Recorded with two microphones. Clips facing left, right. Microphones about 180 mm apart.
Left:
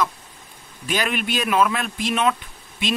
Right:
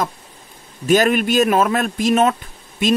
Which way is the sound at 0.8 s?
45° right (ahead or behind).